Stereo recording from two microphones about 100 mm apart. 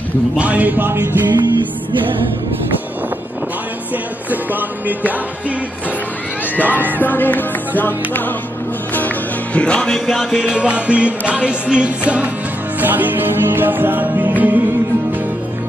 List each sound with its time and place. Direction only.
0.4 s music: 15° right (ahead or behind)
1.3 s music: 50° right (ahead or behind)
3.9 s music: 15° right (ahead or behind)
6.5 s music: 15° left (ahead or behind)
9.9 s music: 5° right (ahead or behind)